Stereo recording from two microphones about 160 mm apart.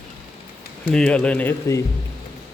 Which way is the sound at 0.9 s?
5° left (ahead or behind).